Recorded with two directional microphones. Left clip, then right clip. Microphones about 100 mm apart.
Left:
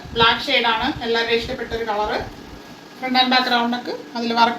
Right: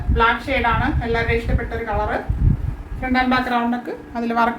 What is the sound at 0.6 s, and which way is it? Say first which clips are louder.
A woman's voice: even; 20° right (ahead or behind).